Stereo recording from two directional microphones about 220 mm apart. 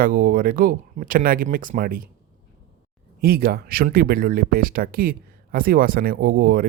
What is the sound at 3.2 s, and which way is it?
Speech, 40° right (ahead or behind).